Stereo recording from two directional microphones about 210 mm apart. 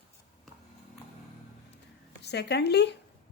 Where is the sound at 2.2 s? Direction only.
50° left (ahead or behind).